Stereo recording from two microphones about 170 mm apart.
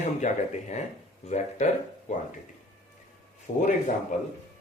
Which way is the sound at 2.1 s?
40° left (ahead or behind).